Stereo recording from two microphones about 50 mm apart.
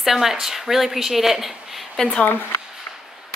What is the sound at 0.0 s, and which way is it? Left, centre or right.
Speech, centre.